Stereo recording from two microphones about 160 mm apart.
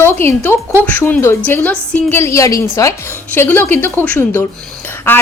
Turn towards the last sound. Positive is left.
turn(degrees=15)  # may be behind; listen again after turning